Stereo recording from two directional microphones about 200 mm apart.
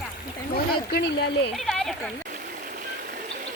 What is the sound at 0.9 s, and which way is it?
Speech, 50° left (ahead or behind).